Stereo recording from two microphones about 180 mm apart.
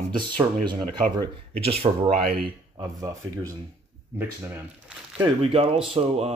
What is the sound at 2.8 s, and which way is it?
Speech, 20° right (ahead or behind).